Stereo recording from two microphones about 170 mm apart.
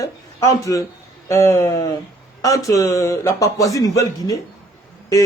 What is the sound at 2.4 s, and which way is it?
A man's voice, 20° left (ahead or behind).